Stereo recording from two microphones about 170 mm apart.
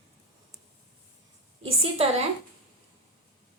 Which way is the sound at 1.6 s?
35° right (ahead or behind).